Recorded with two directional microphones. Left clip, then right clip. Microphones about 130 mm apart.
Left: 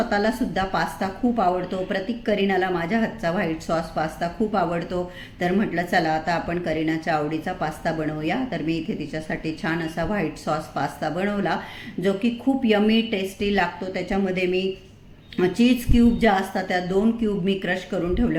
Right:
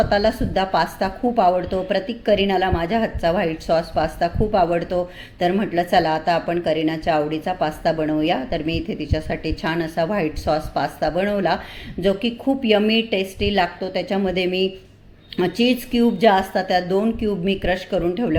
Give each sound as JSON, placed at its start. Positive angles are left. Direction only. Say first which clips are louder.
{"t": 0.1, "sound": "speech", "louder": "right 4 dB", "side_deg": -25}